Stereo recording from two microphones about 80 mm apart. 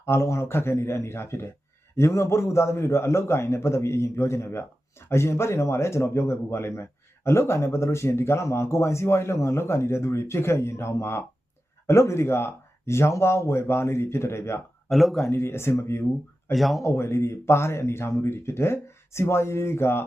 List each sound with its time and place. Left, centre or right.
0.0 s a man's voice: left
14.8 s speech: centre
15.2 s a man's voice: left
16.5 s speech: centre
16.8 s a man's voice: left